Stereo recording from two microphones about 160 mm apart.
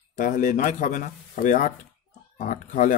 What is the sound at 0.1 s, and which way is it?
Speech, 50° left (ahead or behind).